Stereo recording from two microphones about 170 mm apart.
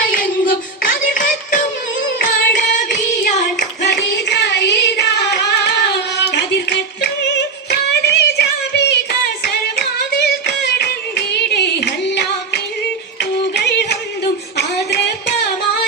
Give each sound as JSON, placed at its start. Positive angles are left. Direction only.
{"t": 0.0, "sound": "music", "side_deg": 55}
{"t": 2.2, "sound": "singing", "side_deg": 50}
{"t": 3.6, "sound": "child singing", "side_deg": 90}
{"t": 9.4, "sound": "music", "side_deg": 70}
{"t": 11.3, "sound": "a sound", "side_deg": 75}
{"t": 13.6, "sound": "yodeling", "side_deg": 80}
{"t": 14.8, "sound": "a sound", "side_deg": 80}